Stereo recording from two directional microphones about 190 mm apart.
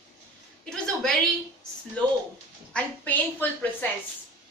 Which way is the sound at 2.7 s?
10° left (ahead or behind).